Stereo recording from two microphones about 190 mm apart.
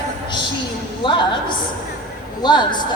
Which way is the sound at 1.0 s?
25° left (ahead or behind).